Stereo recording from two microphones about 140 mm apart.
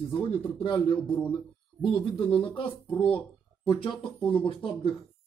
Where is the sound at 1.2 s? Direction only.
40° left (ahead or behind).